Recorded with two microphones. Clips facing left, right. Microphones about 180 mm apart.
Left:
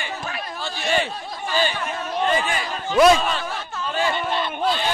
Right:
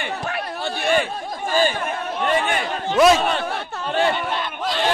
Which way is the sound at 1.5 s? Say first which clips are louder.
Right 3 dB; 45° right (ahead or behind).